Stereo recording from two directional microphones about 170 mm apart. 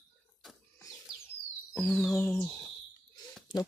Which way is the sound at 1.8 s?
5° left (ahead or behind).